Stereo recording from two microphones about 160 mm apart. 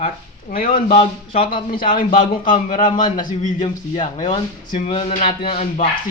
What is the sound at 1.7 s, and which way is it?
A man's voice, 60° left (ahead or behind).